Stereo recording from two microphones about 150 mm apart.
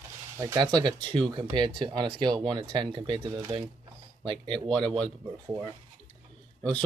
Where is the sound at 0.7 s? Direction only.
30° right (ahead or behind).